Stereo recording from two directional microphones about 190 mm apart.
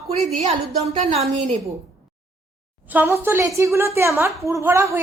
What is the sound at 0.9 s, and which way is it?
Speech, 35° right (ahead or behind).